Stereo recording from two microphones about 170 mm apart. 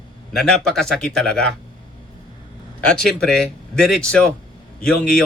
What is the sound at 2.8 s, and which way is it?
A man's voice, 5° left (ahead or behind).